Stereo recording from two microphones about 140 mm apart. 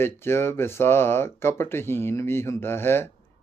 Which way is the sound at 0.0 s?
15° left (ahead or behind).